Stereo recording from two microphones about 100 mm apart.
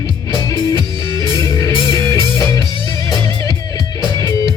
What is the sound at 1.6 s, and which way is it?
Music, 35° left (ahead or behind).